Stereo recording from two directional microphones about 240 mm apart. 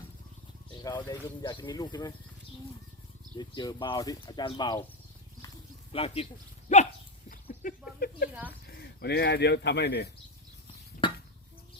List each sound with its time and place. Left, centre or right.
0.8 s speech: centre
3.3 s speech: centre
5.9 s speech: left
6.7 s dog: left
7.3 s a sound: left
8.3 s speech: centre
8.6 s speech: left
11.0 s a sound: left